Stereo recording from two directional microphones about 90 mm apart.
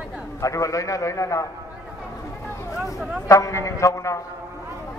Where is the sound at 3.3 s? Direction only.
35° left (ahead or behind).